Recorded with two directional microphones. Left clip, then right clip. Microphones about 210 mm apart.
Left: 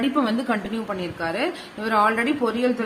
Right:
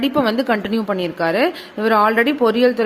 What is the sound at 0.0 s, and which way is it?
A woman's voice, 45° right (ahead or behind).